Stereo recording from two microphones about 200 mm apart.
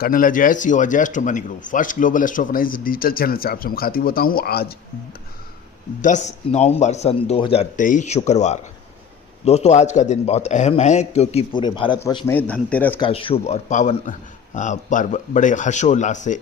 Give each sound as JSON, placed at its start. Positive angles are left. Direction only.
{"t": 0.0, "sound": "speech", "side_deg": 45}
{"t": 6.0, "sound": "a man's voice", "side_deg": 35}
{"t": 13.0, "sound": "a man's voice", "side_deg": 25}